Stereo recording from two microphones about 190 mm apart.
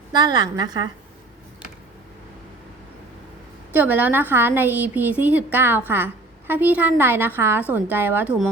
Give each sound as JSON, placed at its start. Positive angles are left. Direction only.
{"t": 0.1, "sound": "a woman's voice", "side_deg": -20}
{"t": 3.7, "sound": "a woman's voice", "side_deg": -10}